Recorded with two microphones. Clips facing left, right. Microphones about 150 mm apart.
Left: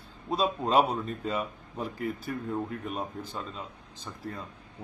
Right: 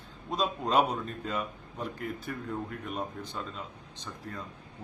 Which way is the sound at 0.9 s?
5° left (ahead or behind).